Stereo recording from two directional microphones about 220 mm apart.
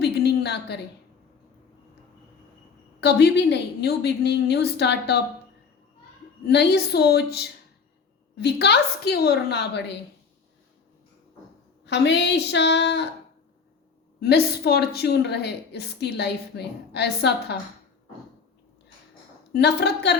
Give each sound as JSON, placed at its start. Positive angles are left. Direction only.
{"t": 0.0, "sound": "a sound", "side_deg": 50}
{"t": 3.0, "sound": "a woman's voice", "side_deg": 50}
{"t": 6.5, "sound": "a woman's voice", "side_deg": 50}
{"t": 11.9, "sound": "a woman's voice", "side_deg": 50}
{"t": 14.2, "sound": "a woman's voice", "side_deg": 45}
{"t": 19.5, "sound": "a woman's voice", "side_deg": 50}